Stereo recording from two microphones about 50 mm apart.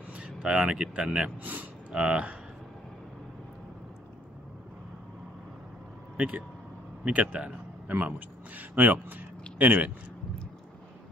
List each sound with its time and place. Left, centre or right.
0.1 s speech: right
1.2 s a sound: right
2.0 s speech: right
6.1 s speech: right